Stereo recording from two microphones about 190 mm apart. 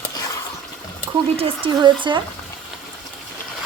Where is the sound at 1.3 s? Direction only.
30° right (ahead or behind).